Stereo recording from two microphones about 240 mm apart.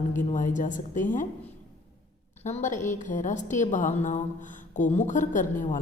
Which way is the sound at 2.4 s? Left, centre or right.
Left.